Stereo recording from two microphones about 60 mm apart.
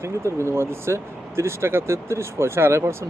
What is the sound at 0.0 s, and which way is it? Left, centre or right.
Speech, right.